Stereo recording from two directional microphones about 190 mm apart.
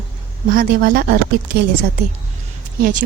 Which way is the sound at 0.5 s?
50° right (ahead or behind).